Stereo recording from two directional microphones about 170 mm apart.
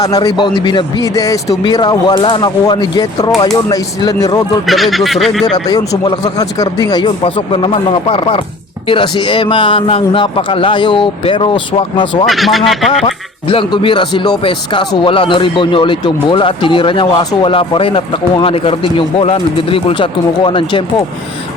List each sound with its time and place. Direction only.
0.0 s a man's voice: 20° left (ahead or behind)
4.6 s speech: centre (ahead or behind)
5.6 s a man's voice: 25° left (ahead or behind)
12.2 s speech: centre (ahead or behind)
13.5 s speech: 30° left (ahead or behind)